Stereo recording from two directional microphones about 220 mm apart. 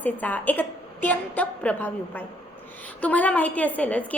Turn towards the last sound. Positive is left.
turn(degrees=5)  # may be behind; listen again after turning